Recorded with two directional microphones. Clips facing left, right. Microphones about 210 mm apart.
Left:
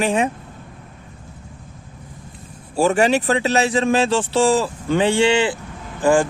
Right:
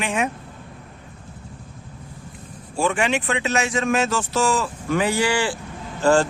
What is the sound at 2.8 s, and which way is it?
Speech, 40° left (ahead or behind).